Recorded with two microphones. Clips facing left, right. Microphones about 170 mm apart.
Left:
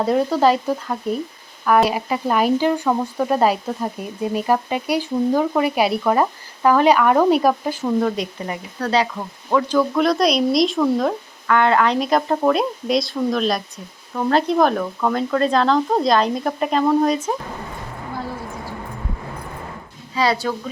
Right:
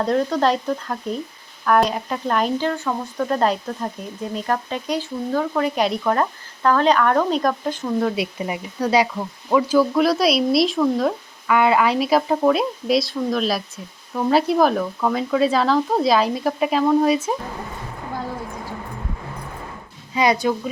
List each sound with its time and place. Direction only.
0.0 s speech: 5° left (ahead or behind)
8.1 s speech: 10° right (ahead or behind)
20.1 s speech: 20° right (ahead or behind)